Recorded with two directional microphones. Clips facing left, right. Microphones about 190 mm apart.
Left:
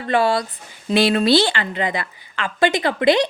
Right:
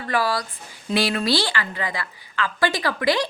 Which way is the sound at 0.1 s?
25° left (ahead or behind).